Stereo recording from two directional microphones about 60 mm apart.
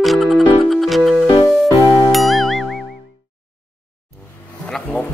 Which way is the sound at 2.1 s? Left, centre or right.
Centre.